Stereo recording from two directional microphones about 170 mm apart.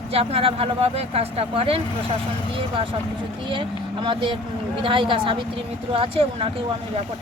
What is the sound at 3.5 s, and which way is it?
Speech, 30° right (ahead or behind).